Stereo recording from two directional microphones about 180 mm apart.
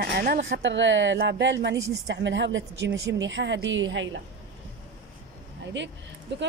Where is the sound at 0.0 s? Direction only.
60° right (ahead or behind); by 4.2 s 90° right.